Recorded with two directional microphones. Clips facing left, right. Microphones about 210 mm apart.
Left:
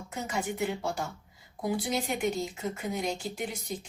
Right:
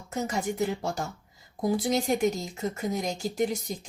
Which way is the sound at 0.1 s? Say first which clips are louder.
Right 4 dB; 40° right (ahead or behind).